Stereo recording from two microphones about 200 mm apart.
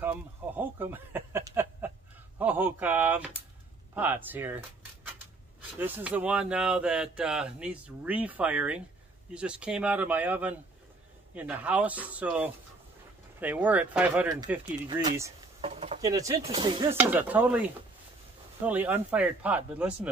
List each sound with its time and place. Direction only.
0.0 s a sound: 10° right (ahead or behind)
2.3 s speech: 10° right (ahead or behind)
5.8 s speech: 10° right (ahead or behind)
14.9 s speech: 20° right (ahead or behind)
15.6 s a sound: 30° right (ahead or behind)
16.0 s speech: 15° right (ahead or behind)